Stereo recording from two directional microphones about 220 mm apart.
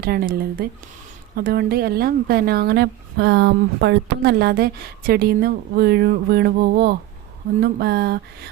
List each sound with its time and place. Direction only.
0.0 s a woman's voice: 45° right (ahead or behind)